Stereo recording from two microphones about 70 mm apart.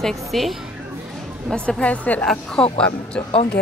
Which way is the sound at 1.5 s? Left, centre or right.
Centre.